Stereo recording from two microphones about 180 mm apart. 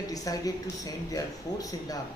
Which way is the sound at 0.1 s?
20° left (ahead or behind).